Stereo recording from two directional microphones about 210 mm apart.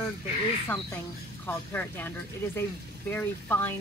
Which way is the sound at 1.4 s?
10° left (ahead or behind).